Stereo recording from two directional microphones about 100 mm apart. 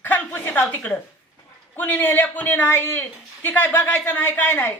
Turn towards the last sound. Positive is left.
turn(degrees=15)  # may be behind; listen again after turning